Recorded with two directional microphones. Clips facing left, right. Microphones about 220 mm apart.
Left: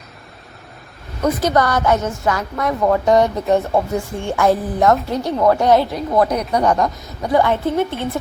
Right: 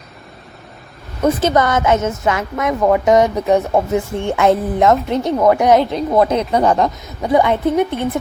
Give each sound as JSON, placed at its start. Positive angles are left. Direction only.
{"t": 1.2, "sound": "speech", "side_deg": -25}